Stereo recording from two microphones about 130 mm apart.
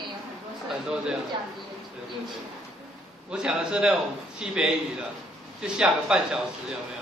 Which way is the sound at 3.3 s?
5° right (ahead or behind).